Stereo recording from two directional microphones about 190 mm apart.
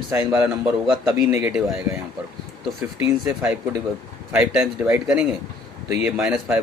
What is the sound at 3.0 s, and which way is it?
Speech, 10° right (ahead or behind).